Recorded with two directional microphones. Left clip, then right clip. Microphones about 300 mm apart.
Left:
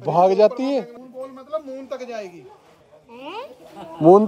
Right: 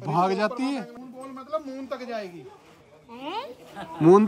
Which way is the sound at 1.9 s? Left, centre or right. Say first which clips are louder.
Left 2 dB; right.